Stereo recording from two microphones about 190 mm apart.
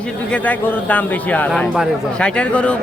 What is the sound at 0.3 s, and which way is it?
A man's voice, 10° left (ahead or behind).